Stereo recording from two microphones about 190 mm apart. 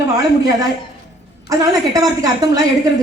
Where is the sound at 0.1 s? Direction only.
20° right (ahead or behind).